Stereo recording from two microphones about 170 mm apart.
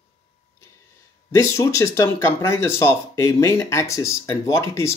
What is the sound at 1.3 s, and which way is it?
Speech, 20° left (ahead or behind).